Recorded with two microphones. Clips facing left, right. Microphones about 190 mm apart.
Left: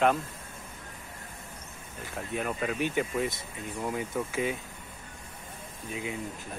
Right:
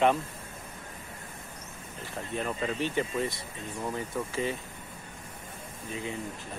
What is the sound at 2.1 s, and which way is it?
Speech, 5° left (ahead or behind).